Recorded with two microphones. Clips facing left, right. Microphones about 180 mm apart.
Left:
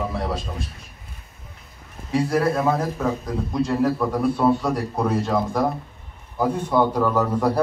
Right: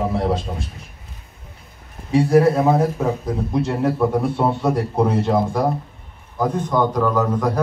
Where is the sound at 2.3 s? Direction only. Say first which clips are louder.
Right 6 dB; 20° right (ahead or behind).